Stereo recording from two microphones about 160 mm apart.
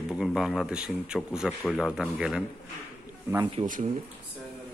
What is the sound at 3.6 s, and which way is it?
Speech, 30° right (ahead or behind).